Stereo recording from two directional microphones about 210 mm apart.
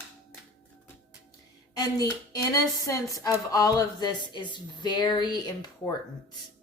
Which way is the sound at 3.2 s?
15° left (ahead or behind).